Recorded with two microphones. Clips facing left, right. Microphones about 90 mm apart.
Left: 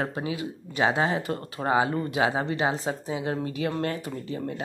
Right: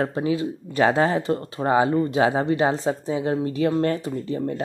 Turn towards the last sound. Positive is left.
turn(degrees=-30)  # may be behind; listen again after turning